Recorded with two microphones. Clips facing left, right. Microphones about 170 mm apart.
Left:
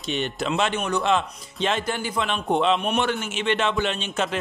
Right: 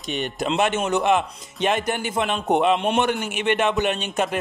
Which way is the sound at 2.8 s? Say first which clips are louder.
Right 3 dB; 25° right (ahead or behind).